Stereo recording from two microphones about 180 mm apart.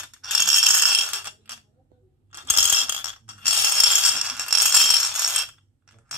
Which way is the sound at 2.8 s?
10° right (ahead or behind).